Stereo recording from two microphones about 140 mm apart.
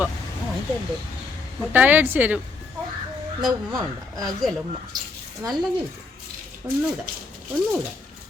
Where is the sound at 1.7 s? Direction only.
10° right (ahead or behind).